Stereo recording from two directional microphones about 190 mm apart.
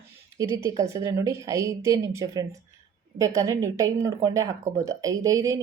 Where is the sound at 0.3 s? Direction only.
15° right (ahead or behind).